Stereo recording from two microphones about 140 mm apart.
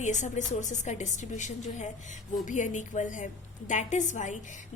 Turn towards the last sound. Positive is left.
turn(degrees=60)  # may be behind; listen again after turning